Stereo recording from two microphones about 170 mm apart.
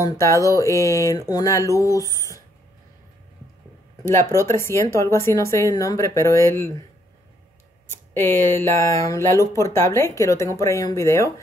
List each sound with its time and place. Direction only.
0.0 s speech: 20° left (ahead or behind)
4.5 s speech: 15° left (ahead or behind)
8.1 s speech: 15° left (ahead or behind)